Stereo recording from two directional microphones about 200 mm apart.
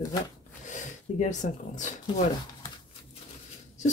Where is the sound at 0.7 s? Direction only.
40° left (ahead or behind).